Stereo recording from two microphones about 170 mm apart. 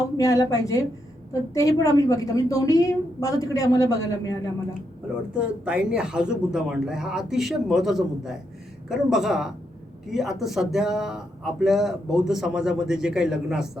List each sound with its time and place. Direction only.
0.2 s a woman's voice: 20° left (ahead or behind)
5.4 s speech: 5° right (ahead or behind)